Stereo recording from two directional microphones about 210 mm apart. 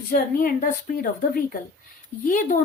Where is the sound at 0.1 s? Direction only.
40° left (ahead or behind).